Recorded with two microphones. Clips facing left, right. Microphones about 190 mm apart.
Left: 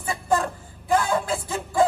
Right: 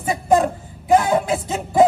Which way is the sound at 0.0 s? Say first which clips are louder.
Right 7 dB; 20° right (ahead or behind).